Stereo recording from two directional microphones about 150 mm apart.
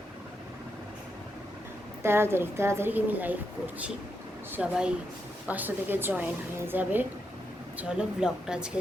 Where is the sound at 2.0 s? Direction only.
15° right (ahead or behind).